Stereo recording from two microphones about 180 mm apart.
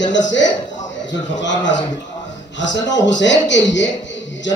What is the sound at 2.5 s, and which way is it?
A man's voice, 85° left.